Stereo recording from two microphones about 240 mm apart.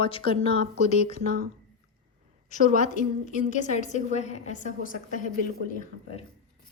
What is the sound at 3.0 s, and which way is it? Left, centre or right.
A woman's voice, left.